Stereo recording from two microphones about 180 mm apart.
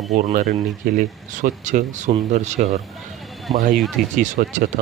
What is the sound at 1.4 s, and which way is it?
Speech, 45° right (ahead or behind).